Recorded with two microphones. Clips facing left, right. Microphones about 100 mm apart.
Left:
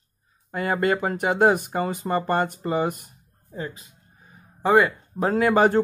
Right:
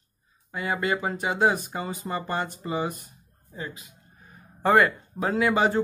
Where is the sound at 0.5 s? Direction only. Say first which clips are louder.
Left 4 dB; 55° left (ahead or behind).